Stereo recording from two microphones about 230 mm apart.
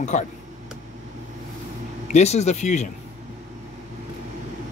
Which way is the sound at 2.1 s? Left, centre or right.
Left.